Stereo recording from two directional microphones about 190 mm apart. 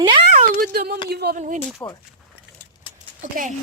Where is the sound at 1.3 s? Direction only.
40° right (ahead or behind).